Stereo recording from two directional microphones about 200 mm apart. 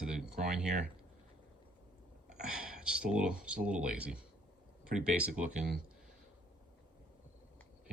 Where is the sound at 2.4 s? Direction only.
5° right (ahead or behind).